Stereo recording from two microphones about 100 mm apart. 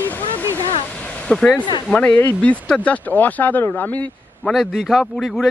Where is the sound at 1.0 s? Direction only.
10° left (ahead or behind).